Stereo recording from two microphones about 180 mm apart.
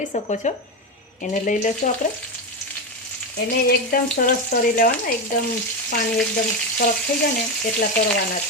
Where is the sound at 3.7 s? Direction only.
55° left (ahead or behind).